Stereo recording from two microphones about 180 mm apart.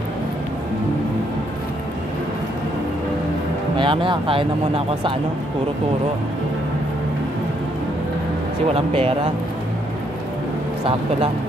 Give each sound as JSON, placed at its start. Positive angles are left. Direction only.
{"t": 3.7, "sound": "speech", "side_deg": -30}
{"t": 8.7, "sound": "speech", "side_deg": -30}